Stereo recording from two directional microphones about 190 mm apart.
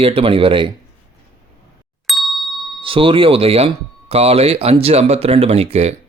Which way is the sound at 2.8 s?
30° right (ahead or behind).